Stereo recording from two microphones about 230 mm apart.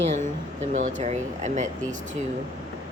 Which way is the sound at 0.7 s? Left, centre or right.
Right.